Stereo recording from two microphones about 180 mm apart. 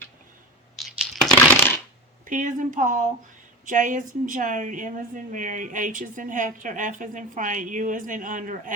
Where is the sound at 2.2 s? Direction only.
45° right (ahead or behind).